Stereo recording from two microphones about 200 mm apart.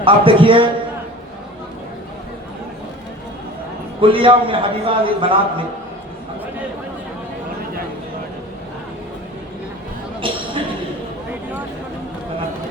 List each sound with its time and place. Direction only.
0.0 s a man's voice: 25° right (ahead or behind)
4.0 s a man's voice: 25° right (ahead or behind)
10.2 s a sound: 25° right (ahead or behind)